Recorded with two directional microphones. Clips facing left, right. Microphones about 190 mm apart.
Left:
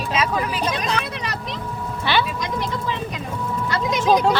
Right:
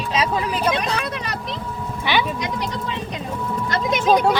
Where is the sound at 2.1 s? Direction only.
15° right (ahead or behind).